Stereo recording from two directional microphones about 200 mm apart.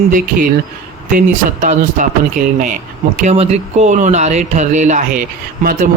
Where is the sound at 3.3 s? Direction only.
35° right (ahead or behind).